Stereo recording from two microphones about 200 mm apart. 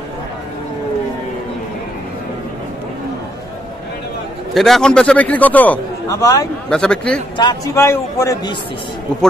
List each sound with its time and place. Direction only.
4.6 s a man's voice: centre (ahead or behind)
6.7 s speech: 5° left (ahead or behind)
7.3 s a man's voice: 20° left (ahead or behind)